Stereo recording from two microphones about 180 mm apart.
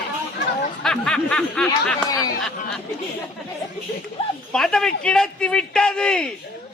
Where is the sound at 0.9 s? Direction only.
5° left (ahead or behind).